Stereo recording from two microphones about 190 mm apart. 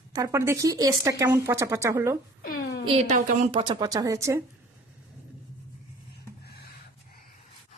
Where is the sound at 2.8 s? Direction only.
30° right (ahead or behind); by 4.4 s 15° right (ahead or behind).